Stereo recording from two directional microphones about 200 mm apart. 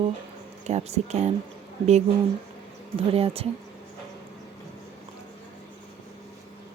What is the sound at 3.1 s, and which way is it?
Speech, 30° right (ahead or behind).